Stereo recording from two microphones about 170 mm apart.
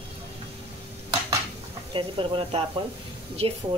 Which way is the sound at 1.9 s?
30° right (ahead or behind).